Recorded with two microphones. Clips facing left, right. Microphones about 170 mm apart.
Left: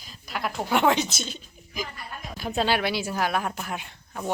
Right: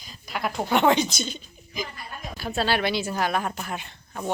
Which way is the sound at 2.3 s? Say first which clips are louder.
Even; 15° left (ahead or behind).